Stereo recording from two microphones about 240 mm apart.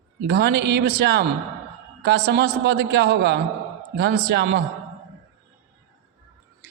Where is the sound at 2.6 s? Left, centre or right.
Right.